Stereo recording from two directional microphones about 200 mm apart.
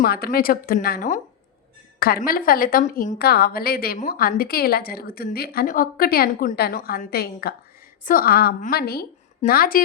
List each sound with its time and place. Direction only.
0.0 s a woman's voice: 50° left (ahead or behind)
2.2 s a woman's voice: 45° left (ahead or behind)